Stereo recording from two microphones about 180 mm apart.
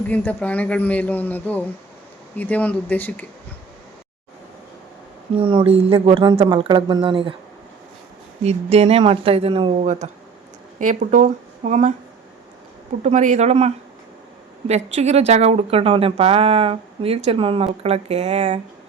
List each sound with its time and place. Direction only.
0.1 s a man's voice: 10° left (ahead or behind)
5.3 s speech: 30° right (ahead or behind)
8.4 s speech: 35° right (ahead or behind)
13.0 s speech: 40° right (ahead or behind)